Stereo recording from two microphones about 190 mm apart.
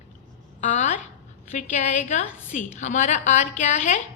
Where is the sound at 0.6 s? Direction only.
40° left (ahead or behind).